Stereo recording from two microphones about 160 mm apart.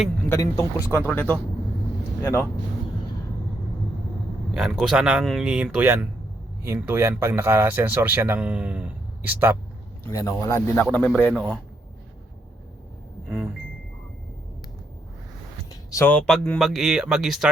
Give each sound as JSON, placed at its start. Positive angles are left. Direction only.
{"t": 0.3, "sound": "speech", "side_deg": 20}
{"t": 4.5, "sound": "speech", "side_deg": -5}
{"t": 10.0, "sound": "speech", "side_deg": 20}
{"t": 10.9, "sound": "speech", "side_deg": 10}
{"t": 13.2, "sound": "a sound", "side_deg": 0}
{"t": 15.9, "sound": "speech", "side_deg": 15}